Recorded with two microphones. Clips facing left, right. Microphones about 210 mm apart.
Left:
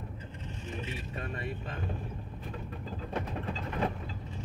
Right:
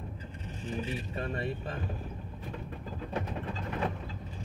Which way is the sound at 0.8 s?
35° right (ahead or behind).